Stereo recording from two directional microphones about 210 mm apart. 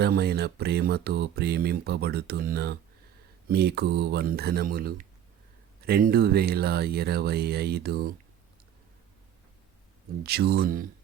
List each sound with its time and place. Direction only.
0.0 s speech: 50° right (ahead or behind)
10.2 s speech: 50° right (ahead or behind)